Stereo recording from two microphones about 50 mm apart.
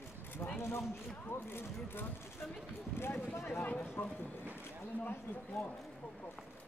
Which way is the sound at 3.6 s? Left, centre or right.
Left.